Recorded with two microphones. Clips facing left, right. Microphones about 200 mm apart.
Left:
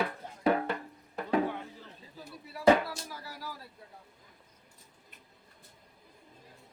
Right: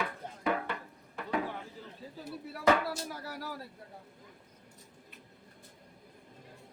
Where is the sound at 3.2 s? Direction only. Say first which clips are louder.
Right 3 dB; 60° right (ahead or behind).